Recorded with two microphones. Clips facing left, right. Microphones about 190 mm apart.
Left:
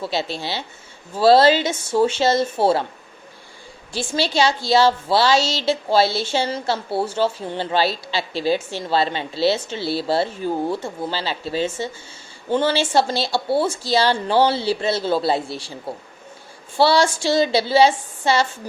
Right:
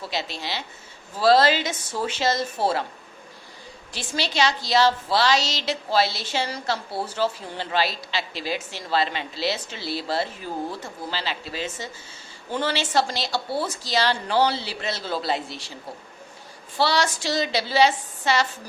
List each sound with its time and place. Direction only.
0.0 s a woman's voice: 30° left (ahead or behind)
3.9 s a woman's voice: 30° left (ahead or behind)
16.7 s a woman's voice: 30° left (ahead or behind)